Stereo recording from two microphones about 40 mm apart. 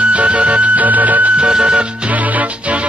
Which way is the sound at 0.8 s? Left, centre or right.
Right.